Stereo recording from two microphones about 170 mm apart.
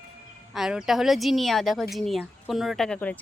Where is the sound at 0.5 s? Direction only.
5° right (ahead or behind).